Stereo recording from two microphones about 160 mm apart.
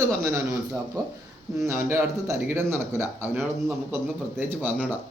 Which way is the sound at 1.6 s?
15° right (ahead or behind).